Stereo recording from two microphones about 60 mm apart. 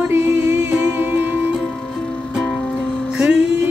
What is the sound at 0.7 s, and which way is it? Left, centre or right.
Music, right.